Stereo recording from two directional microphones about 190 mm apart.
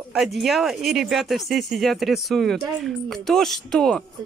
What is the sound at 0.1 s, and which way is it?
Speech, centre (ahead or behind).